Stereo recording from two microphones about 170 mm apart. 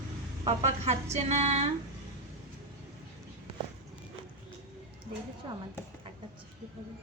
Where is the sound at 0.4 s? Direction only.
40° right (ahead or behind).